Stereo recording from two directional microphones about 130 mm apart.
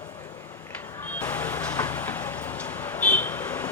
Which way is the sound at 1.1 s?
15° left (ahead or behind).